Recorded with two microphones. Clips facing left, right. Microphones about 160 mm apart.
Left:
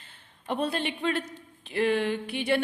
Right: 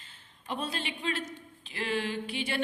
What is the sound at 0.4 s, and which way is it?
A woman's voice, 60° left (ahead or behind).